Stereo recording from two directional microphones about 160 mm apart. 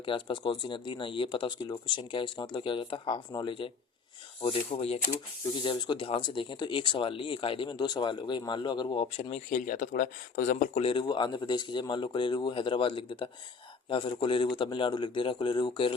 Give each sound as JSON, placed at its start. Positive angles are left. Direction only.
{"t": 0.0, "sound": "speech", "side_deg": 30}